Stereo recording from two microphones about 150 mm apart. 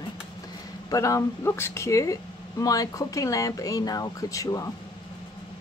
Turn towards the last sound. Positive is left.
turn(degrees=20)  # may be behind; listen again after turning